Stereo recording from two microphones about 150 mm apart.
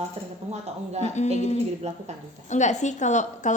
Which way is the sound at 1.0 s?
50° left (ahead or behind).